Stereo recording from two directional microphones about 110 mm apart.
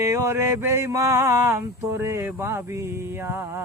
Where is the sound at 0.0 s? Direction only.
25° right (ahead or behind).